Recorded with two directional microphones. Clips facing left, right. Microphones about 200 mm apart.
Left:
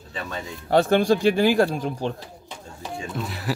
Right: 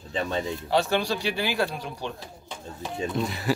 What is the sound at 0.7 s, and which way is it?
Speech, 50° left (ahead or behind).